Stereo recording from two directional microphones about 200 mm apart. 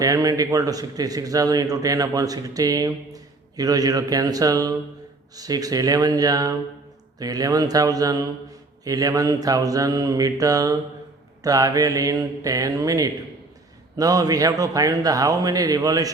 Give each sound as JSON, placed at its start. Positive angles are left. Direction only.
{"t": 0.0, "sound": "a man's voice", "side_deg": -15}